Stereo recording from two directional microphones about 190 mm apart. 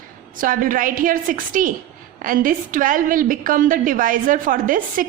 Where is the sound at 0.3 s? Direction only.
45° right (ahead or behind).